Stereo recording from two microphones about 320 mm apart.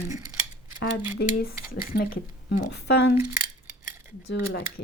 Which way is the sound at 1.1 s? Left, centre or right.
Left.